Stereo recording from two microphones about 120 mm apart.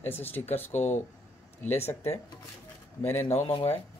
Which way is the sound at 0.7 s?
75° left (ahead or behind).